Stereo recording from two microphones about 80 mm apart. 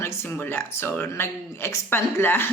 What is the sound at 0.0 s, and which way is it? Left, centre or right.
Speech, left.